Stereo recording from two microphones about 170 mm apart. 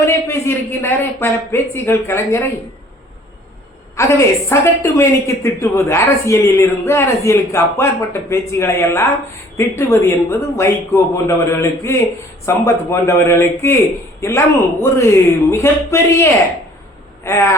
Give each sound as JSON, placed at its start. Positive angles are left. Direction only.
{"t": 0.0, "sound": "a woman's voice", "side_deg": 15}
{"t": 3.9, "sound": "a woman's voice", "side_deg": 15}